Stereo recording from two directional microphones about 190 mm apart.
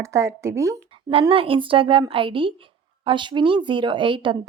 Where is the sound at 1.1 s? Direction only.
30° right (ahead or behind).